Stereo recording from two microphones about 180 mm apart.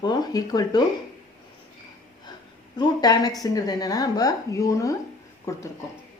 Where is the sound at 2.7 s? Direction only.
20° left (ahead or behind).